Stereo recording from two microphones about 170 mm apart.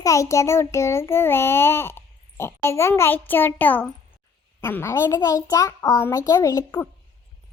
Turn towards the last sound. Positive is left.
turn(degrees=15)  # may be behind; listen again after turning